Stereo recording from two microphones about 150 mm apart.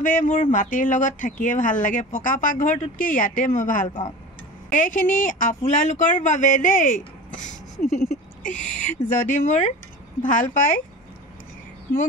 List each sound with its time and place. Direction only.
0.0 s speech: 55° left (ahead or behind)